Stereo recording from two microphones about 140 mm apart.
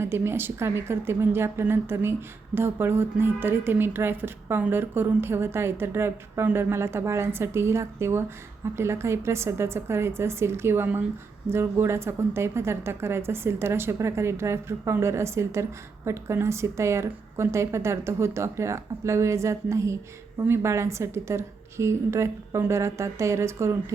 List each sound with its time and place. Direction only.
0.0 s a woman's voice: 15° right (ahead or behind)